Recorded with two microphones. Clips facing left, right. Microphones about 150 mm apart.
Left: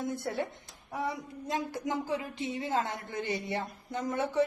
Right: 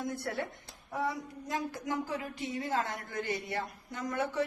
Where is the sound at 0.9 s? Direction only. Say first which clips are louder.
Even; 20° left (ahead or behind).